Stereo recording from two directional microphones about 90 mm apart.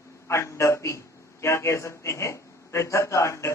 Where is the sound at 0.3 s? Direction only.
30° left (ahead or behind).